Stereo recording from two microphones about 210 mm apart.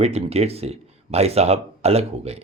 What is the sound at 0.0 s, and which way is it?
A man's voice, 30° right (ahead or behind).